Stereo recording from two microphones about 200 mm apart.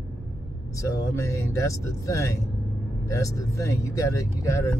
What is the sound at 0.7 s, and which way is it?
Speech, 15° left (ahead or behind).